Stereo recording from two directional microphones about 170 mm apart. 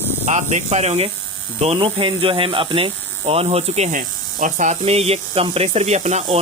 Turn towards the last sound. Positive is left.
turn(degrees=-40)  # may be behind; listen again after turning